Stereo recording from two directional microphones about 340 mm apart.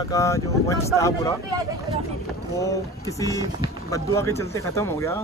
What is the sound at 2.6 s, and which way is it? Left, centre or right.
Speech, centre.